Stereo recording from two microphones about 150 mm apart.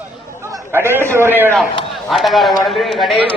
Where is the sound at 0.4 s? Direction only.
20° right (ahead or behind).